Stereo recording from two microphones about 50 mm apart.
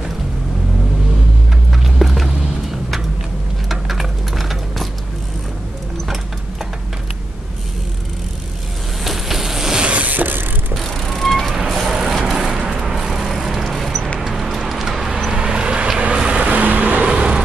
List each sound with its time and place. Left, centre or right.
1.7 s music: centre
3.6 s a sound: centre
9.0 s vehicle: centre
9.8 s mechanisms: right
10.7 s vehicle: centre
14.2 s a sound: centre
15.3 s vehicle: centre